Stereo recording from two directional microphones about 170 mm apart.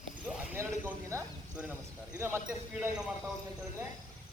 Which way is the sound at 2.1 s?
15° right (ahead or behind).